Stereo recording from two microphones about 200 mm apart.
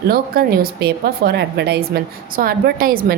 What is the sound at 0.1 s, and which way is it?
A woman's voice, 50° right (ahead or behind).